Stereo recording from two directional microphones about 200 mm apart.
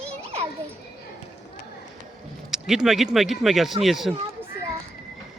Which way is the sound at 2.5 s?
Centre (ahead or behind).